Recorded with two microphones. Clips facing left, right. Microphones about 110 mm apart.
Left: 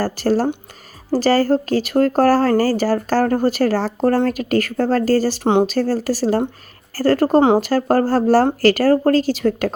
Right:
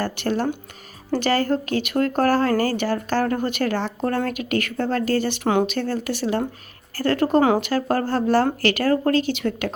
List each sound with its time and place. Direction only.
0.0 s speech: 35° left (ahead or behind)